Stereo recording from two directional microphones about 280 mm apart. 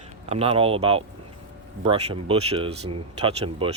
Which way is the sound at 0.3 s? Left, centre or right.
Right.